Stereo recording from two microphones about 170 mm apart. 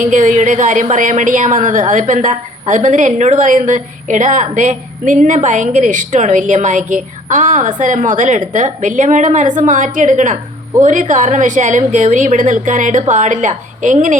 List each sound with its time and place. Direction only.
0.0 s a woman's voice: 45° right (ahead or behind)